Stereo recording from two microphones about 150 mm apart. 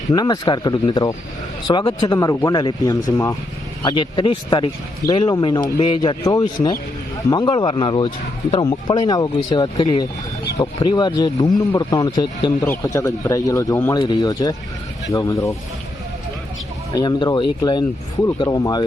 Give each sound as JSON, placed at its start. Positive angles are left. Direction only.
{"t": 0.1, "sound": "speech", "side_deg": 30}
{"t": 2.1, "sound": "speech", "side_deg": 20}
{"t": 12.6, "sound": "speech", "side_deg": 20}
{"t": 16.9, "sound": "speech", "side_deg": 25}